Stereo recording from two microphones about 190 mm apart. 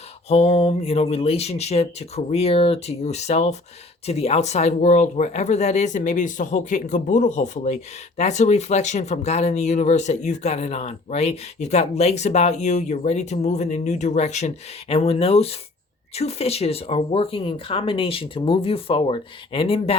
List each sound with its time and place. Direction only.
0.3 s speech: 35° left (ahead or behind)